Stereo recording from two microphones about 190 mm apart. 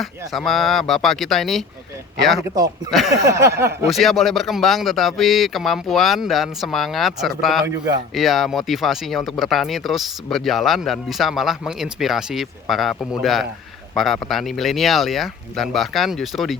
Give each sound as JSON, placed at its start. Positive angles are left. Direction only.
{"t": 0.0, "sound": "speech", "side_deg": 0}
{"t": 3.1, "sound": "a sound", "side_deg": -15}
{"t": 3.8, "sound": "speech", "side_deg": 0}
{"t": 7.6, "sound": "a man's voice", "side_deg": -20}
{"t": 8.1, "sound": "speech", "side_deg": 0}